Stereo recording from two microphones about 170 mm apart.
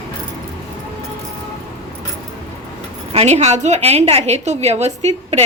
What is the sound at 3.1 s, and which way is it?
A woman's voice, 40° right (ahead or behind).